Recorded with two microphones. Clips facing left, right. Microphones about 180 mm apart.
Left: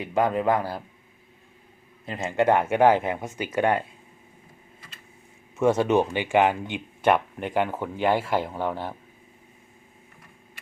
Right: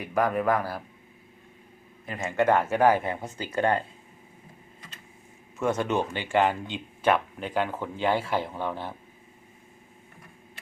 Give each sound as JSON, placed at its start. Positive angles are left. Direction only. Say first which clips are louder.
{"t": 0.0, "sound": "speech", "louder": "left 2 dB", "side_deg": 25}
{"t": 2.0, "sound": "speech", "louder": "left 2 dB", "side_deg": 25}
{"t": 5.5, "sound": "speech", "louder": "left 6 dB", "side_deg": 20}